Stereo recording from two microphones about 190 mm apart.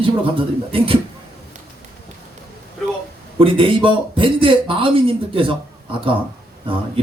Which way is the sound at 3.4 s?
25° right (ahead or behind).